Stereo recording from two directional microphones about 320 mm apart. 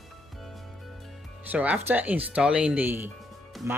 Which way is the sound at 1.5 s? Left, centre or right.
Centre.